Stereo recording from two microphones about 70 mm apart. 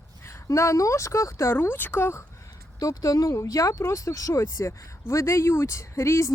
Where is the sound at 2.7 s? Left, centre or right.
Left.